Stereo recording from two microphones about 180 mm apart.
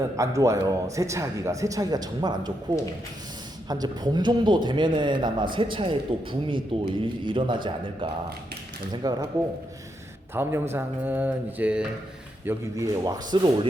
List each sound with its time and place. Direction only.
0.2 s a man's voice: 15° right (ahead or behind)
10.3 s a man's voice: 15° right (ahead or behind)
12.5 s a man's voice: 15° right (ahead or behind)